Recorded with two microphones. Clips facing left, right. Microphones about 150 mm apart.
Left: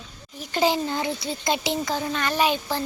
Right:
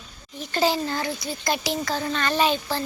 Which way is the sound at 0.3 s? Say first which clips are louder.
Left 1 dB; 15° left (ahead or behind).